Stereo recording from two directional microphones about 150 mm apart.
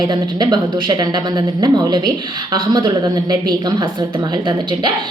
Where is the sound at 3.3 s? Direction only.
30° right (ahead or behind).